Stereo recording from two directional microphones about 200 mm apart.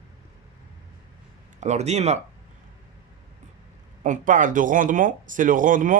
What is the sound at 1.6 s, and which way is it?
Speech, 35° right (ahead or behind).